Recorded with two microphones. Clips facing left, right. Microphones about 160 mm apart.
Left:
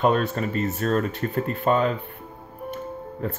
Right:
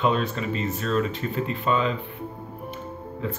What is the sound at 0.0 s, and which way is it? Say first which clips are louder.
Speech: left 3 dB; 50° left (ahead or behind).